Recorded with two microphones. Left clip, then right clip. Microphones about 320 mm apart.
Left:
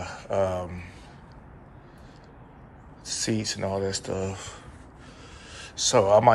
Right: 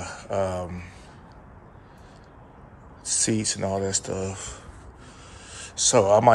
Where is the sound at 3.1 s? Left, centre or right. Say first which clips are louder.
Right 3 dB; centre.